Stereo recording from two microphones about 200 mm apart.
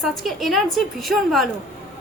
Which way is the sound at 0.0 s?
Centre (ahead or behind).